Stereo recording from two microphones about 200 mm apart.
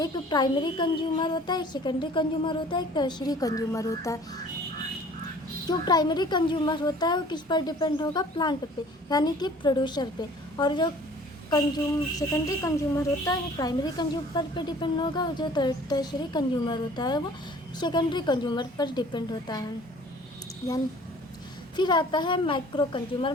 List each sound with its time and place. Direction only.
0.0 s a woman's voice: 20° left (ahead or behind)
5.6 s a woman's voice: 20° left (ahead or behind)
12.3 s a woman's voice: 15° left (ahead or behind)
21.8 s a woman's voice: 20° left (ahead or behind)